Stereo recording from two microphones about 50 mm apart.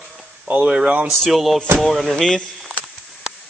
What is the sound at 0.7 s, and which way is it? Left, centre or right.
Speech, right.